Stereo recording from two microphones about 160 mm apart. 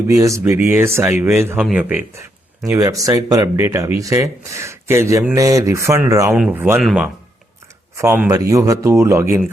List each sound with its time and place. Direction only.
0.1 s speech: 20° right (ahead or behind)
2.6 s speech: 20° right (ahead or behind)
6.7 s speech: 5° right (ahead or behind)
7.9 s speech: 15° right (ahead or behind)